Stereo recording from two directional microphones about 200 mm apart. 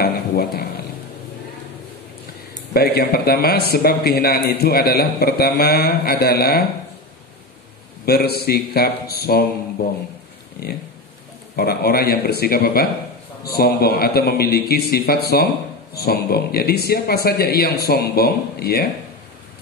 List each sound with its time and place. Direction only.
0.0 s speech: 50° left (ahead or behind)
2.7 s a man's voice: 50° left (ahead or behind)
8.0 s a man's voice: 50° left (ahead or behind)